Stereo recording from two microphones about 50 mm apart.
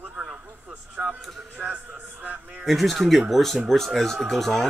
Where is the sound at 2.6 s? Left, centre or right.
Centre.